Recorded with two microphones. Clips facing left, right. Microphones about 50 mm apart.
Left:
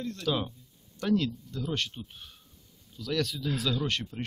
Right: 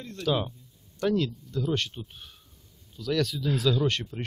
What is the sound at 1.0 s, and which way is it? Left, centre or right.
Speech, right.